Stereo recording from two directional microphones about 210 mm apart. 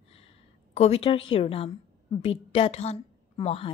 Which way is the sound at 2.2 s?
25° left (ahead or behind).